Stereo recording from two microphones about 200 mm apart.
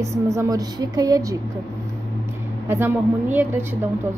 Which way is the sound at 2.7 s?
10° right (ahead or behind).